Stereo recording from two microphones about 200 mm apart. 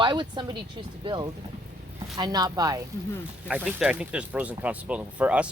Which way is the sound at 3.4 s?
5° right (ahead or behind).